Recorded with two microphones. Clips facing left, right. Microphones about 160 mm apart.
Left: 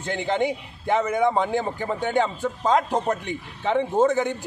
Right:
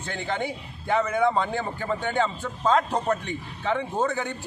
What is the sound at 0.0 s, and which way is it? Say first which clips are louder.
A man's voice: left 6 dB; 15° left (ahead or behind).